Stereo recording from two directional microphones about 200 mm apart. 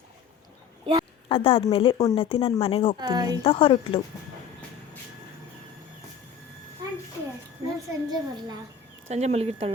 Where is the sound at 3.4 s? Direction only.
25° left (ahead or behind).